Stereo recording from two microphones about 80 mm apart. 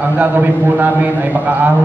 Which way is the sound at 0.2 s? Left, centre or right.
Right.